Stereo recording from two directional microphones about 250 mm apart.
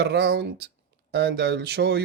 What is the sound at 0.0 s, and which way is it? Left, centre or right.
Speech, right.